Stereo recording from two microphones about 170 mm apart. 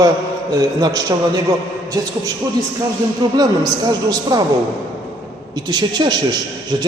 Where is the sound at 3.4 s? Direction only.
20° right (ahead or behind).